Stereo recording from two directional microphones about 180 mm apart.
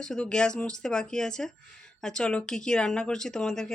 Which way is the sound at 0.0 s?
5° left (ahead or behind).